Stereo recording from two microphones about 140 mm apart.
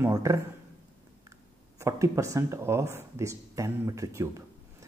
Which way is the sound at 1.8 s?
20° right (ahead or behind).